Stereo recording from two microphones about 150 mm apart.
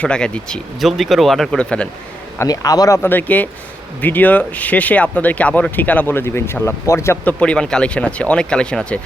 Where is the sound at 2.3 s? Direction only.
25° left (ahead or behind).